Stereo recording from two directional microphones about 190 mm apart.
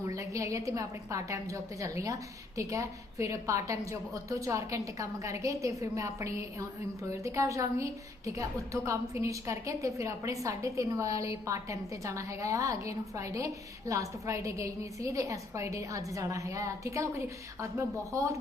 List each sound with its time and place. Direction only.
0.0 s a woman's voice: 15° right (ahead or behind)